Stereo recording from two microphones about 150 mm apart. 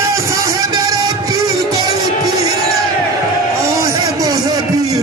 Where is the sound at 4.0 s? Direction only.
25° right (ahead or behind).